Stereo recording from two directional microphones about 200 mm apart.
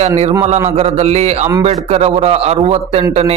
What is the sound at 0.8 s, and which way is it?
A man's voice, 35° right (ahead or behind).